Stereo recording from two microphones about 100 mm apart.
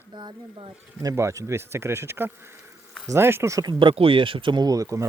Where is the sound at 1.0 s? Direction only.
35° right (ahead or behind).